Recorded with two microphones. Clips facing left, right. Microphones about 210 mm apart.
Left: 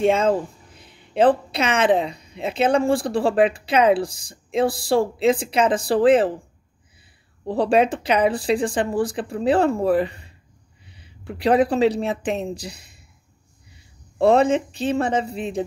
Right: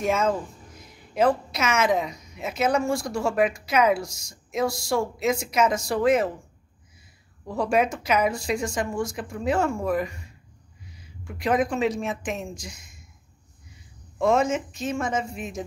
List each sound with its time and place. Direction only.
0.0 s a woman's voice: 30° left (ahead or behind)
7.4 s a woman's voice: 30° left (ahead or behind)
14.1 s a woman's voice: 35° left (ahead or behind)